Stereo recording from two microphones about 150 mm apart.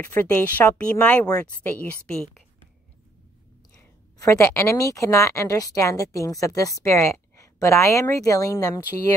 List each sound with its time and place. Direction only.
0.0 s speech: 15° left (ahead or behind)
4.2 s speech: 20° left (ahead or behind)